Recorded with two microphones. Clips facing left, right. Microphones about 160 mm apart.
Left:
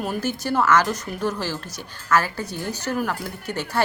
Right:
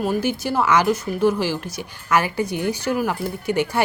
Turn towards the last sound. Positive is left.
turn(degrees=-10)  # may be behind; listen again after turning